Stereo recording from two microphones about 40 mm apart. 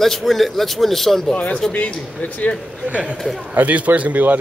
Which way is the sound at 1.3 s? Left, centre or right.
Left.